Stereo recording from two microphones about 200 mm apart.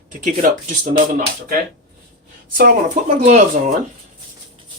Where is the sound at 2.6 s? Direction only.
40° right (ahead or behind).